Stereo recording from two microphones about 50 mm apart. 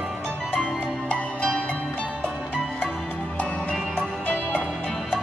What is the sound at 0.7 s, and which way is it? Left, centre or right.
Music, left.